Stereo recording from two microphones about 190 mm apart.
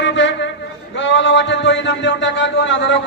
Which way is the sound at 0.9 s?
75° left (ahead or behind).